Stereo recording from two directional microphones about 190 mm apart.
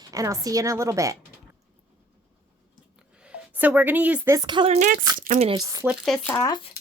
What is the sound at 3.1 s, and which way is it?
A woman's voice, 5° right (ahead or behind).